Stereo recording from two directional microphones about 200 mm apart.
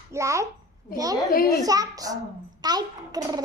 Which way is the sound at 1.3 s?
45° left (ahead or behind).